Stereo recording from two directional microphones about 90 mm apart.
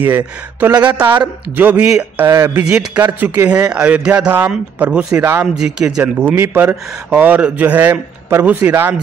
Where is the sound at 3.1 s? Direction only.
30° right (ahead or behind).